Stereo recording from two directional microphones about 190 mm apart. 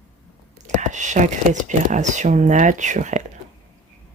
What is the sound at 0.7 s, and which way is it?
Speech, 40° right (ahead or behind).